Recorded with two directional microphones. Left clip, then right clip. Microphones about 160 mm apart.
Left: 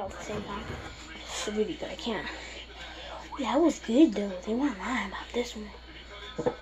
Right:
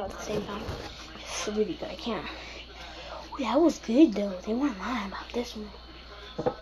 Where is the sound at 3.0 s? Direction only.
35° right (ahead or behind).